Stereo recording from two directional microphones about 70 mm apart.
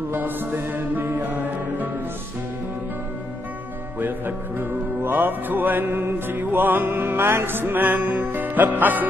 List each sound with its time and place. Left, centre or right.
0.1 s music: right
4.6 s music: right